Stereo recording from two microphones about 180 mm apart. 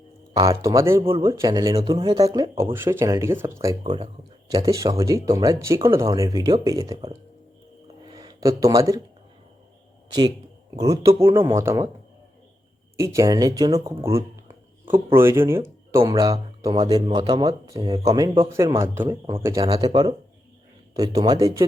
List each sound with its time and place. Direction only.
0.4 s speech: 15° right (ahead or behind)
8.0 s a sound: 20° right (ahead or behind)
10.8 s speech: 20° right (ahead or behind)
13.0 s speech: 20° right (ahead or behind)